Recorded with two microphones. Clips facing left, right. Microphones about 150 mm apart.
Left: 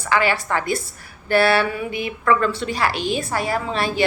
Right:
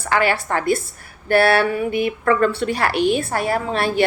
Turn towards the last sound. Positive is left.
turn(degrees=-55)  # may be behind; listen again after turning